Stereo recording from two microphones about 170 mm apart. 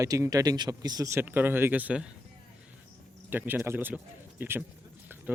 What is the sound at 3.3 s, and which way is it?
Speech, 10° right (ahead or behind).